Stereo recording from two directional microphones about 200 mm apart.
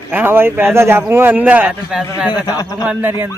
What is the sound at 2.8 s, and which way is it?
Speech, 10° right (ahead or behind).